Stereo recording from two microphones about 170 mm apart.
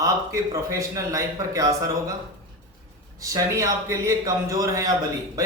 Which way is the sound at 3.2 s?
20° right (ahead or behind).